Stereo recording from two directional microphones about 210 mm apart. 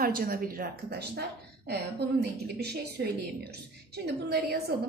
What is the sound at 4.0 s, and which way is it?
Speech, 50° right (ahead or behind).